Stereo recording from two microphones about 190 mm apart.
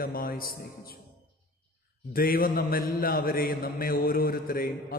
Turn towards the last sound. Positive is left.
turn(degrees=50)  # may be behind; listen again after turning